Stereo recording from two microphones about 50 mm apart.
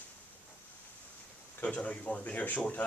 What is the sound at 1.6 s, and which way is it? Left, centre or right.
Speech, left.